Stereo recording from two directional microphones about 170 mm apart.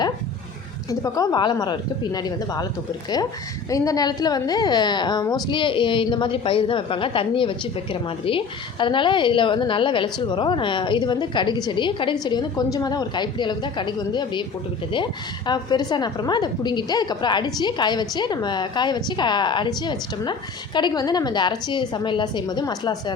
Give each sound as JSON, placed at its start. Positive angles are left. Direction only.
{"t": 0.9, "sound": "a woman's voice", "side_deg": 20}
{"t": 3.7, "sound": "a woman's voice", "side_deg": 20}
{"t": 15.4, "sound": "a woman's voice", "side_deg": 25}